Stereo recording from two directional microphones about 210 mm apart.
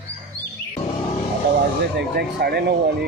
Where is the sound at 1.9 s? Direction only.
50° right (ahead or behind).